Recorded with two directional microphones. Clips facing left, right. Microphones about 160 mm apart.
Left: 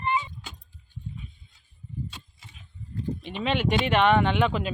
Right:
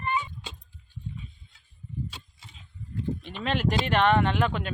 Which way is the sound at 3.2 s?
Centre (ahead or behind).